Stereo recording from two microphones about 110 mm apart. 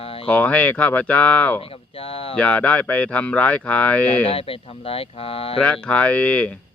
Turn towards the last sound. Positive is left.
turn(degrees=10)  # may be behind; listen again after turning